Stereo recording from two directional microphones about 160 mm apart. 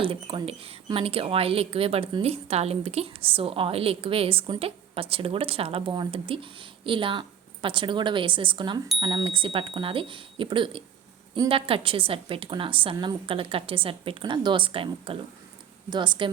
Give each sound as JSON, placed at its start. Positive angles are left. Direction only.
{"t": 0.0, "sound": "a woman's voice", "side_deg": -35}